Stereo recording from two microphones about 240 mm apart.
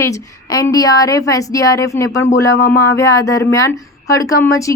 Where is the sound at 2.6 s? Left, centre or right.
Left.